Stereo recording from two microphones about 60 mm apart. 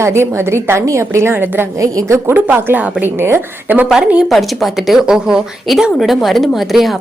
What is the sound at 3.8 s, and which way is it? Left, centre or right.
A woman's voice, centre.